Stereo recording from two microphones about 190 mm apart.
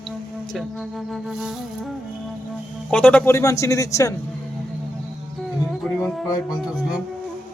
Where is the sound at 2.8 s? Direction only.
5° left (ahead or behind).